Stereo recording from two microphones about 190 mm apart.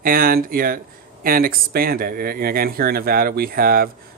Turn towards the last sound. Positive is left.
turn(degrees=-50)  # may be behind; listen again after turning